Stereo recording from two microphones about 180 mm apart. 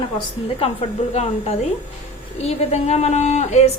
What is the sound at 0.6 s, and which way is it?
Speech, 35° left (ahead or behind).